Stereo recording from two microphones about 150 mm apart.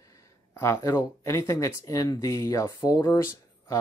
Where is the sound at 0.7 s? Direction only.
25° left (ahead or behind).